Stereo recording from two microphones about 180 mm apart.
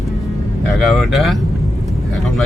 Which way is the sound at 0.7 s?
Centre (ahead or behind).